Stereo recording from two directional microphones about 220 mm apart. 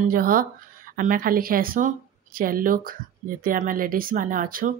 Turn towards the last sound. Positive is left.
turn(degrees=-40)  # may be behind; listen again after turning